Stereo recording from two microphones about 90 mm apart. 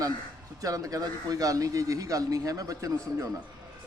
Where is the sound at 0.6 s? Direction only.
40° right (ahead or behind).